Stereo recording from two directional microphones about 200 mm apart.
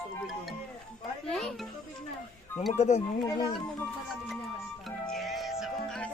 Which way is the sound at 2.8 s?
35° left (ahead or behind).